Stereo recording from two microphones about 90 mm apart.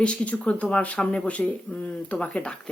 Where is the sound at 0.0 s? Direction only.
15° left (ahead or behind).